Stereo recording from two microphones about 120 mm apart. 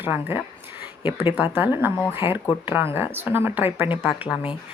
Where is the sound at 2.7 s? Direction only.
15° right (ahead or behind).